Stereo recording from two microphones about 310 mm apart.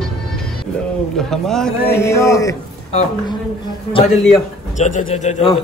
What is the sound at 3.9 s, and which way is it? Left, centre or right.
A man's voice, centre.